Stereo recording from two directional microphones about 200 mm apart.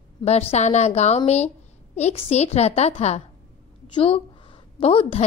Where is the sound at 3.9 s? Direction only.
25° left (ahead or behind).